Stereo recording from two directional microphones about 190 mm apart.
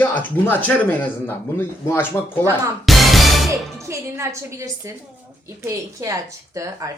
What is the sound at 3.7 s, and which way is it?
Speech, 15° right (ahead or behind).